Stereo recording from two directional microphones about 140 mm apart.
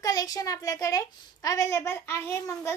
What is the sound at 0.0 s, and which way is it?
A woman's voice, 25° left (ahead or behind).